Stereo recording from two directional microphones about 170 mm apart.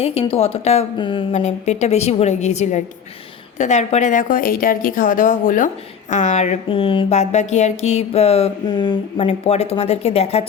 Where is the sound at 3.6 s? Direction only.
40° left (ahead or behind).